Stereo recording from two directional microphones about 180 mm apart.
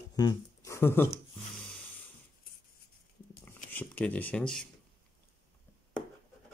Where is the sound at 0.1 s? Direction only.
20° left (ahead or behind).